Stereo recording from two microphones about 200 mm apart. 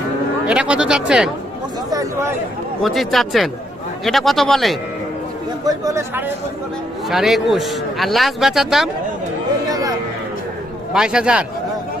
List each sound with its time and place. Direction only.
0.4 s a man's voice: 5° right (ahead or behind)
1.9 s speech: 15° right (ahead or behind)
2.8 s a man's voice: centre (ahead or behind)
5.6 s speech: 15° right (ahead or behind)
7.1 s a man's voice: centre (ahead or behind)
9.6 s a sound: 20° right (ahead or behind)
10.9 s a man's voice: 5° right (ahead or behind)